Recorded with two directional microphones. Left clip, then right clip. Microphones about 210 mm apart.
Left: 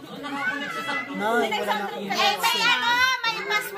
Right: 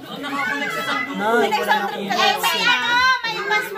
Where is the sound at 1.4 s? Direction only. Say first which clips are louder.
Right 6 dB; 25° right (ahead or behind).